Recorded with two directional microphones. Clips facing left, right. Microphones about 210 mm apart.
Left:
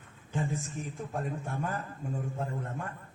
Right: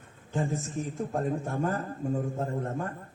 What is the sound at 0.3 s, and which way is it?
A man's voice, 40° right (ahead or behind).